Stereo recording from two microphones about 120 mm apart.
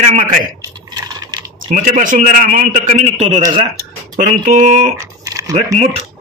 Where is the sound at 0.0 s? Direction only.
90° right.